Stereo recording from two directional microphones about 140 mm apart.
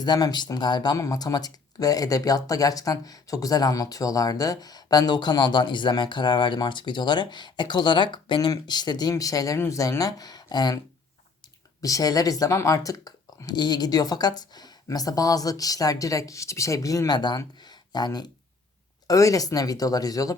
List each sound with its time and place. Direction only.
0.0 s speech: 30° left (ahead or behind)
11.8 s speech: 25° left (ahead or behind)